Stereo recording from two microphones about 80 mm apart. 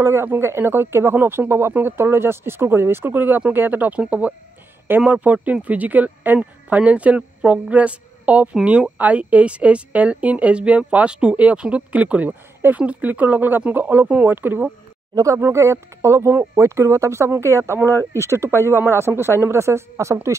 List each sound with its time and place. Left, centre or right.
0.0 s speech: right
15.1 s speech: right